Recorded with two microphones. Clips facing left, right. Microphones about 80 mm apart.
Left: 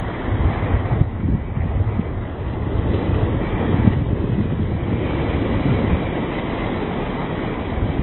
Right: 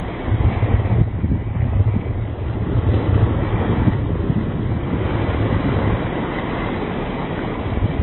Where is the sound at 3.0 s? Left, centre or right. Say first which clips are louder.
Right 1 dB; right.